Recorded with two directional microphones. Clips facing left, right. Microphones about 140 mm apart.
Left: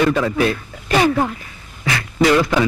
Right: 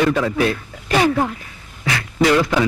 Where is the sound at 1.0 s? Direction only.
25° left (ahead or behind).